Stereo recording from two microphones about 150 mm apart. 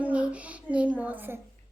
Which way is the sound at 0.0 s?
10° right (ahead or behind).